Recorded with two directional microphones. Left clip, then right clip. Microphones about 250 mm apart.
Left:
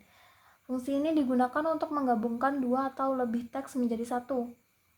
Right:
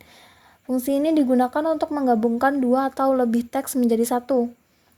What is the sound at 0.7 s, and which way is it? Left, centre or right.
A woman's voice, right.